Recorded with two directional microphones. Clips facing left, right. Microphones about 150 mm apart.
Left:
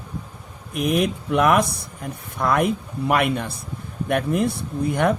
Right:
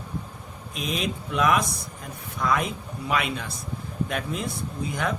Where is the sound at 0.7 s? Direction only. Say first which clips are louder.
Left 8 dB; 60° left (ahead or behind).